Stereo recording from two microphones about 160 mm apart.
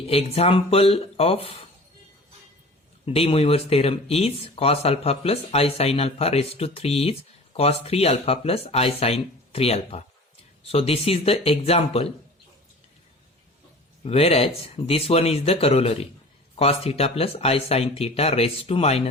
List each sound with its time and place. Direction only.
0.1 s speech: 40° left (ahead or behind)
3.1 s speech: 35° left (ahead or behind)
14.0 s speech: 40° left (ahead or behind)